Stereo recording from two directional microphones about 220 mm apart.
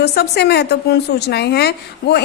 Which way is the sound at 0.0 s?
45° left (ahead or behind).